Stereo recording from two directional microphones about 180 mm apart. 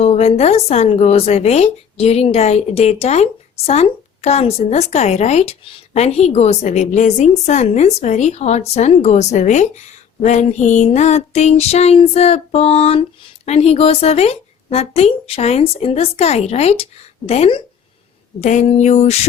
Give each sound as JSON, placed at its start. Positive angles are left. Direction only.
{"t": 0.0, "sound": "a woman's voice", "side_deg": 35}